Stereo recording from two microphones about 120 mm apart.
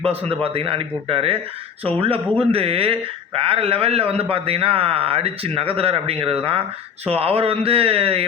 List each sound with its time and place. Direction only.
0.0 s a man's voice: 55° right (ahead or behind)